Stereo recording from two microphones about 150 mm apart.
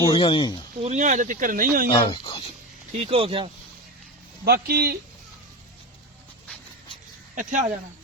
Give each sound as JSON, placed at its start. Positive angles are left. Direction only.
{"t": 0.1, "sound": "speech", "side_deg": 35}
{"t": 0.8, "sound": "speech", "side_deg": -50}
{"t": 1.9, "sound": "speech", "side_deg": 35}
{"t": 2.9, "sound": "speech", "side_deg": -40}
{"t": 4.4, "sound": "speech", "side_deg": -90}
{"t": 7.3, "sound": "speech", "side_deg": -60}